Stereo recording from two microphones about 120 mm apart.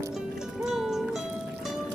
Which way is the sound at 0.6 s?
5° right (ahead or behind).